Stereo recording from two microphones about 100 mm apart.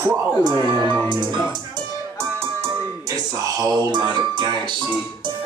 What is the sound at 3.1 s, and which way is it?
Speech, 35° right (ahead or behind).